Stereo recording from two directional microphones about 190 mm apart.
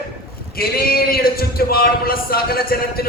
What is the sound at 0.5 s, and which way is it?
A man's voice, 50° left (ahead or behind).